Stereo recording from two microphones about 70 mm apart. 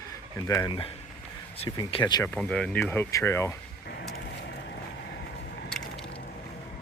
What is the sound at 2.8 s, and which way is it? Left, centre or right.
Speech, left.